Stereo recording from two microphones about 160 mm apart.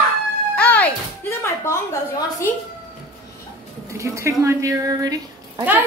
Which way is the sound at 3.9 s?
20° right (ahead or behind).